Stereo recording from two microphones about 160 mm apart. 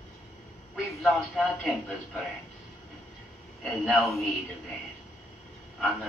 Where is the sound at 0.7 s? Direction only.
Centre (ahead or behind).